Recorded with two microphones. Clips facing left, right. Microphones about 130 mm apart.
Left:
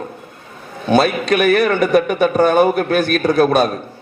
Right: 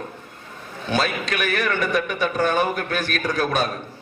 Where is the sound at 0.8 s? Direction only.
60° left (ahead or behind).